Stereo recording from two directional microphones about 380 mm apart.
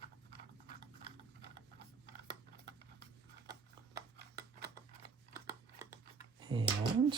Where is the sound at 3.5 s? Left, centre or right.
Centre.